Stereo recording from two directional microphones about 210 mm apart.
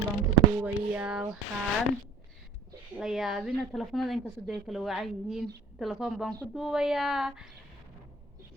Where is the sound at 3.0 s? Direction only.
Centre (ahead or behind).